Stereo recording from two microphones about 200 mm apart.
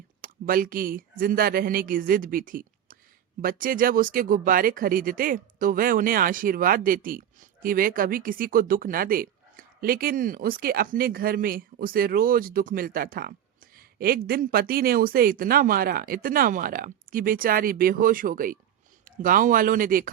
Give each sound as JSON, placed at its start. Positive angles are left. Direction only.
{"t": 0.2, "sound": "speech", "side_deg": -45}
{"t": 13.7, "sound": "a sound", "side_deg": -50}
{"t": 14.3, "sound": "speech", "side_deg": -50}